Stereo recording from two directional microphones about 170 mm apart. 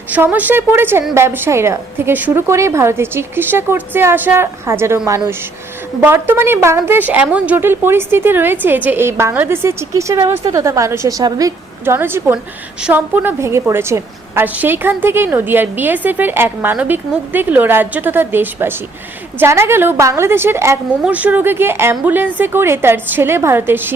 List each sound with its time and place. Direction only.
0.1 s a woman's voice: 10° right (ahead or behind)